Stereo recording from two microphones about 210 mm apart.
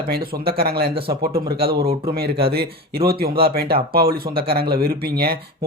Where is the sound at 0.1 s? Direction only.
45° right (ahead or behind).